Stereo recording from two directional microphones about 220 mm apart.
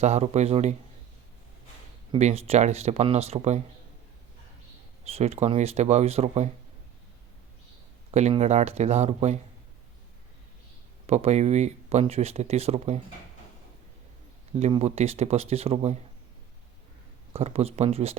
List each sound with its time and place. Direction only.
0.0 s speech: 30° right (ahead or behind)
2.1 s speech: 30° right (ahead or behind)
5.0 s speech: 30° right (ahead or behind)
8.1 s speech: 30° right (ahead or behind)
11.0 s speech: 30° right (ahead or behind)
14.5 s speech: 25° right (ahead or behind)
17.3 s speech: 25° right (ahead or behind)